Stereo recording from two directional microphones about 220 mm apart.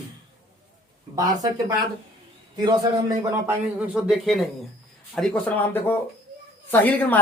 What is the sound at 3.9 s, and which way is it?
Speech, centre (ahead or behind).